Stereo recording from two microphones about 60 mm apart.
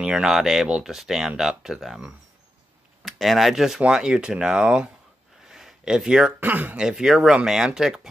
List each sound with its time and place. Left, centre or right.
0.0 s speech: centre
5.5 s a sound: centre
6.4 s speech: right
6.8 s speech: centre